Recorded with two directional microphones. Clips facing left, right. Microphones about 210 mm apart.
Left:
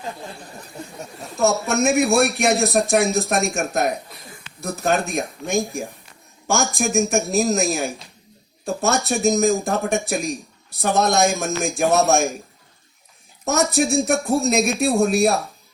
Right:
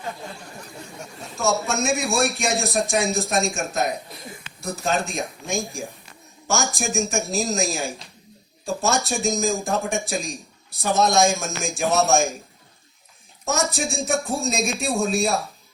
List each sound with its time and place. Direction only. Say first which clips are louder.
1.4 s a man's voice: left 4 dB; 60° left (ahead or behind)
13.4 s a man's voice: left 5 dB; 60° left (ahead or behind)